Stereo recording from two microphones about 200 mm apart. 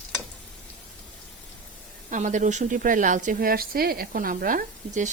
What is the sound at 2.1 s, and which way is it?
Speech, 35° right (ahead or behind).